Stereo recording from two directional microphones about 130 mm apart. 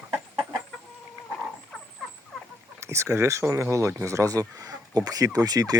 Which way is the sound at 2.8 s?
20° right (ahead or behind).